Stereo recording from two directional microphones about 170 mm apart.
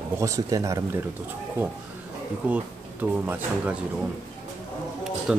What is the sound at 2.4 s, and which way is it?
Speech, 10° right (ahead or behind).